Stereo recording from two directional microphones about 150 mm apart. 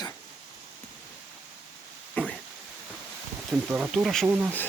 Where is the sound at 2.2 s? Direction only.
10° left (ahead or behind).